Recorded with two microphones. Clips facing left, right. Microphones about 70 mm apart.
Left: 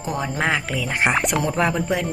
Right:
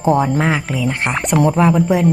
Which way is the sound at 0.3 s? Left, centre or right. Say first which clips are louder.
Right 5 dB; centre.